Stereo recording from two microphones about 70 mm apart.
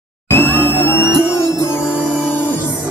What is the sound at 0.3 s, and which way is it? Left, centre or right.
Music, left.